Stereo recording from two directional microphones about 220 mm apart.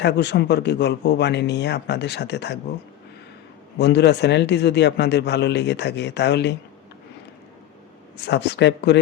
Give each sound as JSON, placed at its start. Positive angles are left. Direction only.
{"t": 0.0, "sound": "a man's voice", "side_deg": 50}
{"t": 3.8, "sound": "a man's voice", "side_deg": 50}
{"t": 8.1, "sound": "a man's voice", "side_deg": 50}